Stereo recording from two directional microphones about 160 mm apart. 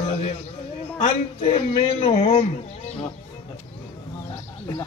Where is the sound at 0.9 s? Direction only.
35° left (ahead or behind).